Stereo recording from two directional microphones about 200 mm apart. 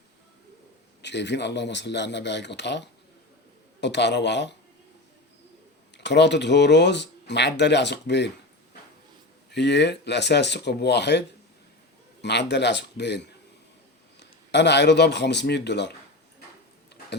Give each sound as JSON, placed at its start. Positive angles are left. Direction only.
{"t": 1.0, "sound": "speech", "side_deg": 60}
{"t": 6.0, "sound": "speech", "side_deg": 60}
{"t": 9.5, "sound": "speech", "side_deg": 60}
{"t": 12.2, "sound": "speech", "side_deg": 60}